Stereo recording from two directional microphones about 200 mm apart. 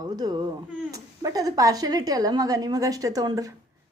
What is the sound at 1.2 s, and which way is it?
A woman's voice, 15° right (ahead or behind).